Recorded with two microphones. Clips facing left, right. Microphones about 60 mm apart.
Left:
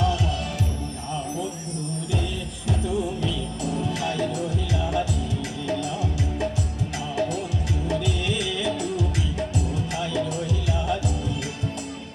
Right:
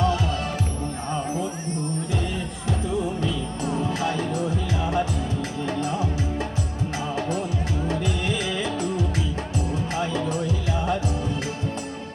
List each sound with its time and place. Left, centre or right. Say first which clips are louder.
0.0 s music: right 1 dB; right
3.2 s music: right 1 dB; right